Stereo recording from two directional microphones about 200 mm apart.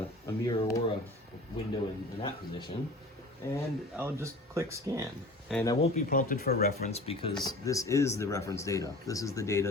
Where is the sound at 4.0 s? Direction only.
15° right (ahead or behind).